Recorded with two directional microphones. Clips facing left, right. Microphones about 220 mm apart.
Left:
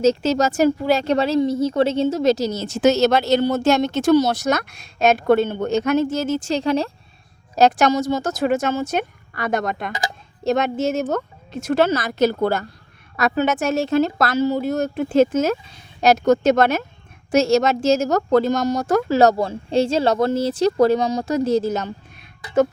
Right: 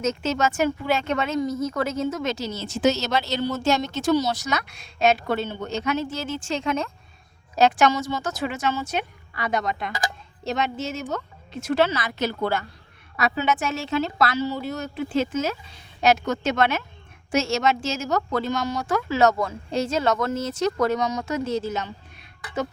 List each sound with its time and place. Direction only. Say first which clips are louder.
0.0 s a woman's voice: left 7 dB; 35° left (ahead or behind)